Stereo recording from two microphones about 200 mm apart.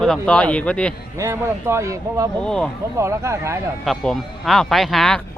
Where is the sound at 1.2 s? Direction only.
15° right (ahead or behind).